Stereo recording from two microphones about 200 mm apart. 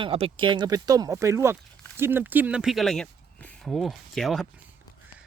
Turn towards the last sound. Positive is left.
turn(degrees=0)  # may be behind; listen again after turning